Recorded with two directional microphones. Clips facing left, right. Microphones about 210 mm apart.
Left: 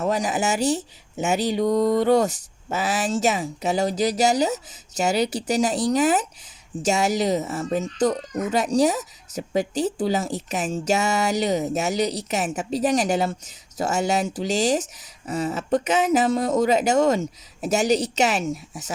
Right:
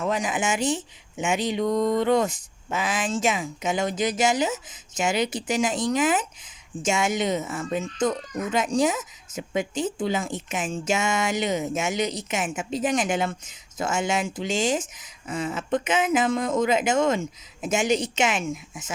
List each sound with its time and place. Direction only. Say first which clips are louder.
0.0 s speech: left 3 dB; 40° left (ahead or behind)